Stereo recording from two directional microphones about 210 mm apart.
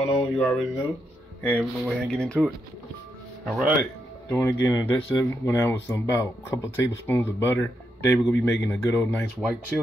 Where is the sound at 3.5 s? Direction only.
Centre (ahead or behind).